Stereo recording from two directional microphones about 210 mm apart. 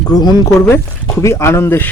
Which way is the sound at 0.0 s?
20° left (ahead or behind).